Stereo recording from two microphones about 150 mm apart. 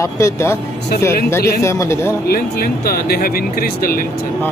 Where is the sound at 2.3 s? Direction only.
90° left.